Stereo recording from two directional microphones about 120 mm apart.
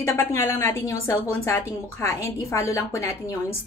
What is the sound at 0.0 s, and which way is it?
A woman's voice, 25° left (ahead or behind).